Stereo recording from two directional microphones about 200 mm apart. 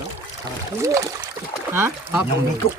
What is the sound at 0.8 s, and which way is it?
Speech, 15° right (ahead or behind).